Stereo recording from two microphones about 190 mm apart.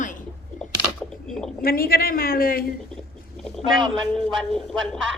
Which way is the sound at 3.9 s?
5° left (ahead or behind).